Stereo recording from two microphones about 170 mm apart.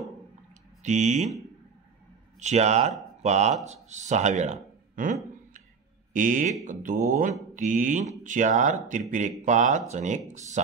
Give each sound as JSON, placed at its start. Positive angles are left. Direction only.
{"t": 0.8, "sound": "speech", "side_deg": -45}
{"t": 2.4, "sound": "speech", "side_deg": -40}
{"t": 6.1, "sound": "speech", "side_deg": -50}